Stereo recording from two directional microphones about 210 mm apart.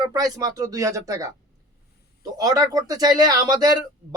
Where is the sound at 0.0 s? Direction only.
15° right (ahead or behind).